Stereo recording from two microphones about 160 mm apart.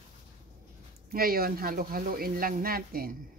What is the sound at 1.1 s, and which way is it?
Speech, 70° right (ahead or behind).